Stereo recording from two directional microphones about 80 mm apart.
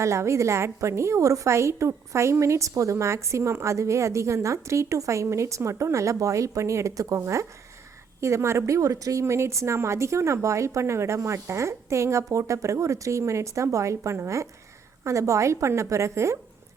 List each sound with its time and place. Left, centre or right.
0.0 s a woman's voice: right
8.2 s a woman's voice: right